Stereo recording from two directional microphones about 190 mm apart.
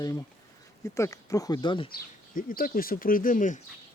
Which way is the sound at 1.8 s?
50° left (ahead or behind).